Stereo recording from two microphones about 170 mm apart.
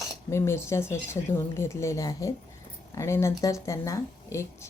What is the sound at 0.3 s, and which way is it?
Speech, 15° left (ahead or behind).